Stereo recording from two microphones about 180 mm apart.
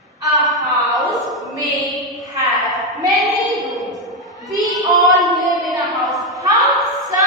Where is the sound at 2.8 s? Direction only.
Centre (ahead or behind).